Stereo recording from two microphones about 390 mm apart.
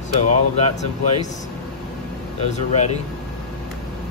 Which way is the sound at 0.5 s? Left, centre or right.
Centre.